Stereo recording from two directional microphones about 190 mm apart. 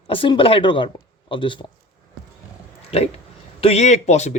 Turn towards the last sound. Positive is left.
turn(degrees=35)  # may be behind; listen again after turning